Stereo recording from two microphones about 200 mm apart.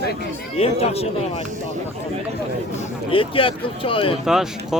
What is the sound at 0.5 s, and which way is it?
Speech, 30° left (ahead or behind).